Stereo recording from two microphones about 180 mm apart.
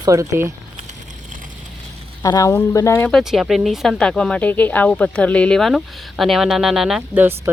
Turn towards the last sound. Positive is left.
turn(degrees=-10)  # may be behind; listen again after turning